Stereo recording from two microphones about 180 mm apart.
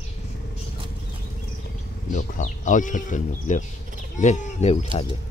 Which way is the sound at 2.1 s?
45° left (ahead or behind).